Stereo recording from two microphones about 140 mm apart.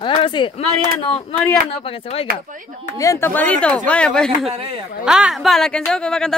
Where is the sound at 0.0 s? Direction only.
35° left (ahead or behind).